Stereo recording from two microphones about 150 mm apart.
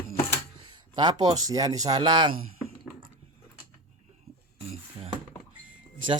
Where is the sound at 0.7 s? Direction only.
25° right (ahead or behind).